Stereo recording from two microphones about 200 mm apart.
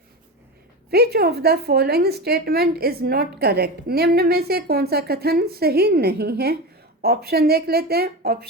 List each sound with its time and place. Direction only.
0.9 s a woman's voice: 50° right (ahead or behind)